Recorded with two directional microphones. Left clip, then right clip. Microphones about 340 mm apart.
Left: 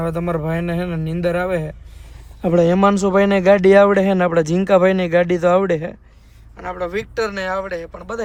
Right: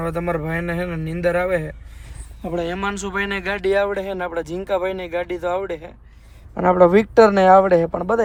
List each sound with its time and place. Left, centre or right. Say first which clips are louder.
0.0 s a man's voice: left 1 dB; centre
2.4 s a man's voice: left 10 dB; centre
6.7 s speech: right 10 dB; centre